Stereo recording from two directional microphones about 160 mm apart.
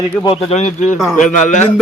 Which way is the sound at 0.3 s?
45° left (ahead or behind).